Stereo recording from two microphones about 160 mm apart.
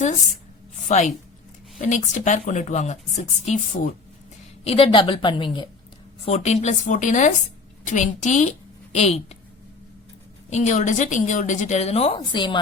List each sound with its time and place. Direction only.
0.0 s a woman's voice: 50° left (ahead or behind)
4.6 s a woman's voice: 35° left (ahead or behind)
6.2 s a woman's voice: 45° left (ahead or behind)
10.5 s a woman's voice: 45° left (ahead or behind); by 12.5 s 30° left (ahead or behind)